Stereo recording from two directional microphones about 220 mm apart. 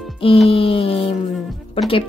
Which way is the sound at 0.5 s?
25° left (ahead or behind).